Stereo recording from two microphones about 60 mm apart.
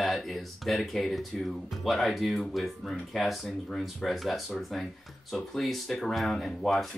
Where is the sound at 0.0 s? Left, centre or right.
Centre.